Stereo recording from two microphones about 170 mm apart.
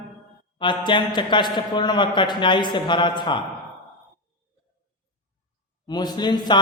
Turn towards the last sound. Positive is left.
turn(degrees=25)  # may be behind; listen again after turning